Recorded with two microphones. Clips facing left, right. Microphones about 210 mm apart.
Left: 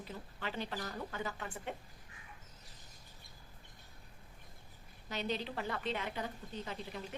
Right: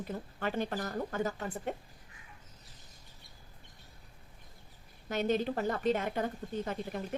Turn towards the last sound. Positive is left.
turn(degrees=-50)  # may be behind; listen again after turning